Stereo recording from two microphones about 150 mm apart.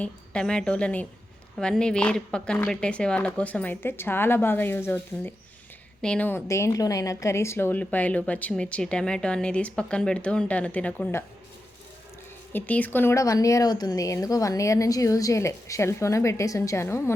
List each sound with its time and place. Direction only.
0.0 s a woman's voice: 5° left (ahead or behind)
12.5 s speech: 10° left (ahead or behind)